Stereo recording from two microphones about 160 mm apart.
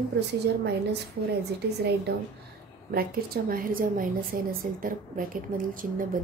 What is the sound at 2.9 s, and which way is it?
A woman's voice, 65° right (ahead or behind).